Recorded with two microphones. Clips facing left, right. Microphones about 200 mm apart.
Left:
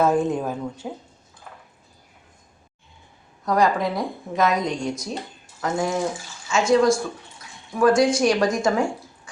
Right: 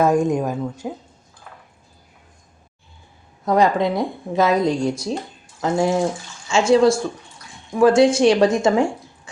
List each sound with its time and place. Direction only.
0.0 s a woman's voice: 15° right (ahead or behind)
3.4 s a woman's voice: 25° right (ahead or behind)